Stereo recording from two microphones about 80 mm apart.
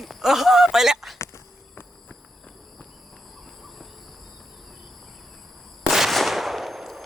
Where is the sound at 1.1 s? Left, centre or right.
Left.